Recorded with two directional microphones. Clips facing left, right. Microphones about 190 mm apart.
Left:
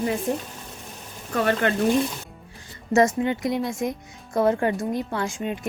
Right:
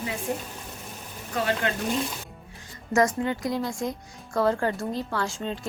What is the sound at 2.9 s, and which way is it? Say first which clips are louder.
Speech: left 3 dB; 25° left (ahead or behind).